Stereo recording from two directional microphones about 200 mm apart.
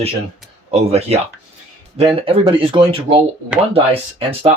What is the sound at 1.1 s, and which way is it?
Speech, 30° right (ahead or behind).